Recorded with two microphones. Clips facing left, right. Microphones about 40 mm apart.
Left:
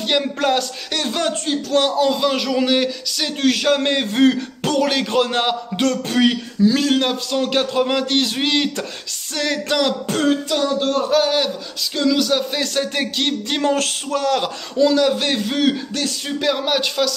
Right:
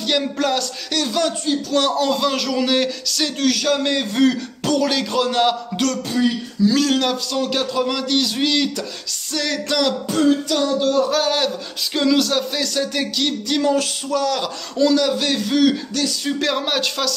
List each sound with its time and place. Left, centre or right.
0.0 s a man's voice: left
1.8 s speech: centre
3.3 s a man's voice: left
6.2 s a man's voice: left
6.6 s a man's voice: left
10.0 s a sound: left
11.1 s speech: centre
11.9 s a sound: centre
12.2 s speech: centre
12.5 s a man's voice: left
14.8 s speech: centre
15.1 s a man's voice: left
16.3 s a man's voice: centre